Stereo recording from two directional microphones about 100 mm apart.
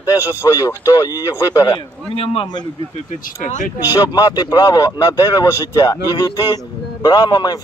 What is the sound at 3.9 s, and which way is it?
Speech, 40° left (ahead or behind).